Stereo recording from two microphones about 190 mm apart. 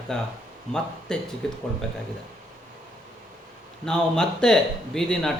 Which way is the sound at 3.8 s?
5° left (ahead or behind).